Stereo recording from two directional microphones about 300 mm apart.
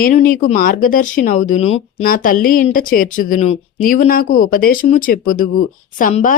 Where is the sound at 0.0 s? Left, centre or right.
Left.